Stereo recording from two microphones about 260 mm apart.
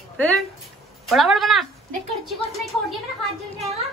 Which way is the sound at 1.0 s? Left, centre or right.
Centre.